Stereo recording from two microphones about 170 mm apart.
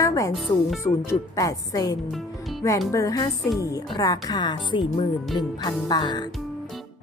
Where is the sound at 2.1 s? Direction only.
Centre (ahead or behind).